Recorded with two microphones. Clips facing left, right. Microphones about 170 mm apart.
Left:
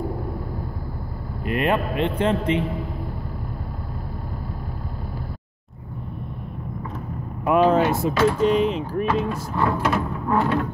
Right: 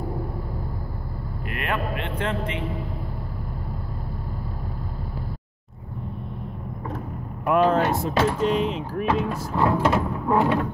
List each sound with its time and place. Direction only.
1.5 s a man's voice: 25° left (ahead or behind)
7.4 s speech: centre (ahead or behind)
9.8 s a sound: 15° right (ahead or behind)